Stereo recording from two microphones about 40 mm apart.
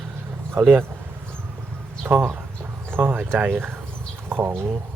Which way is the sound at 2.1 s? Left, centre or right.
Right.